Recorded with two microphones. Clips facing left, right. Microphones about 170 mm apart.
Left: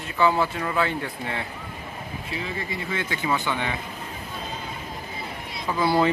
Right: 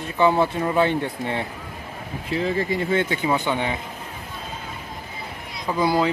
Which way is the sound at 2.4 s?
35° right (ahead or behind).